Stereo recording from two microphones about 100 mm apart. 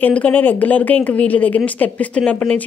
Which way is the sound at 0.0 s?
15° left (ahead or behind).